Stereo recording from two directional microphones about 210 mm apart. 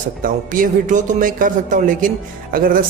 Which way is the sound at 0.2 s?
40° right (ahead or behind).